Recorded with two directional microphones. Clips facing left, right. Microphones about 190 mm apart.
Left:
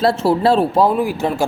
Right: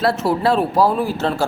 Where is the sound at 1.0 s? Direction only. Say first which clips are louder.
Left 2 dB; 15° left (ahead or behind).